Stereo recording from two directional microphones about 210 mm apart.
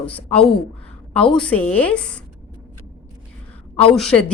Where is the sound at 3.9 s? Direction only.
5° left (ahead or behind).